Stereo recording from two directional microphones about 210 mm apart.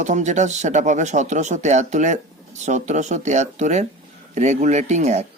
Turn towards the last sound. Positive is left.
turn(degrees=-35)  # may be behind; listen again after turning